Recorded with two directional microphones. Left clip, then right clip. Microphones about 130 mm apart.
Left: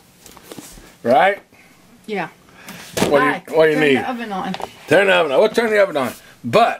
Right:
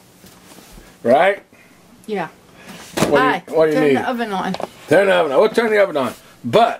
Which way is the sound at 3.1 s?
45° right (ahead or behind).